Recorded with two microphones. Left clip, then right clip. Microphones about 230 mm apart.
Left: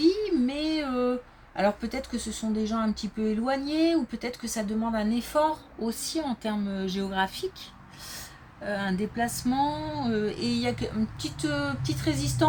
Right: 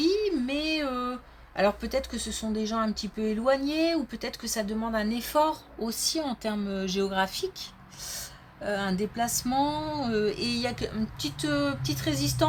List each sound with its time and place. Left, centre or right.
0.0 s a sound: right
1.5 s speech: right
8.6 s speech: right